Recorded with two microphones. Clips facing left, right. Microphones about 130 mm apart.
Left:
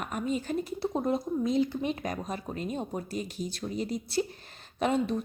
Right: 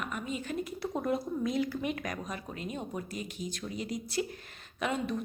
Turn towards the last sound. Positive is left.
turn(degrees=30)  # may be behind; listen again after turning